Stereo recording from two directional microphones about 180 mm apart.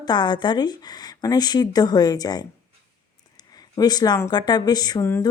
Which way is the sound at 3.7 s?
20° left (ahead or behind).